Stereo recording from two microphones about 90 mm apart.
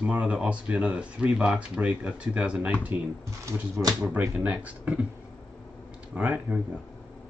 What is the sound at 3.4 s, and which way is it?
Speech, 35° right (ahead or behind).